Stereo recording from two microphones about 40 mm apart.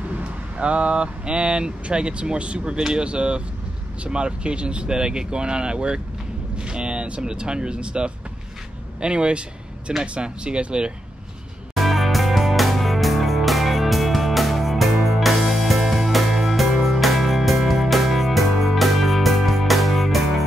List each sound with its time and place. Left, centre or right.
0.1 s speech: right
11.7 s music: centre